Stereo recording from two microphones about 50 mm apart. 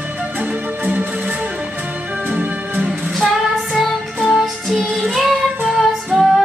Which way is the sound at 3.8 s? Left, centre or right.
Centre.